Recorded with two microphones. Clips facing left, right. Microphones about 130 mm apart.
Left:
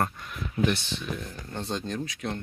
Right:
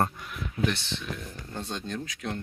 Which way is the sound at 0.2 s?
15° right (ahead or behind).